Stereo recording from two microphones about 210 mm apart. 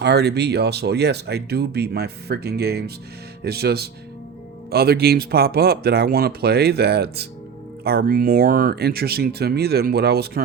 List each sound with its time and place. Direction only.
0.0 s speech: 50° right (ahead or behind)